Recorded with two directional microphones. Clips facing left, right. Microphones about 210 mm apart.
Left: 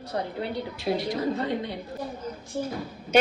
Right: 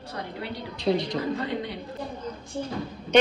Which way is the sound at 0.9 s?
60° right (ahead or behind).